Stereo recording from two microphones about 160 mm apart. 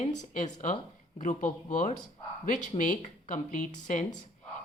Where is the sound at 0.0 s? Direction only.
50° left (ahead or behind).